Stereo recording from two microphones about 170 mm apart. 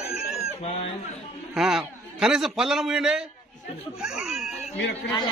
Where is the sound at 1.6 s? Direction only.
Centre (ahead or behind).